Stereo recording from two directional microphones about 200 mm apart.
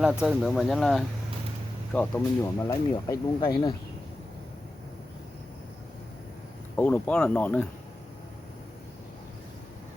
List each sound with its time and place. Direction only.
0.0 s speech: 5° right (ahead or behind); by 3.8 s 20° left (ahead or behind)
6.7 s speech: 10° left (ahead or behind)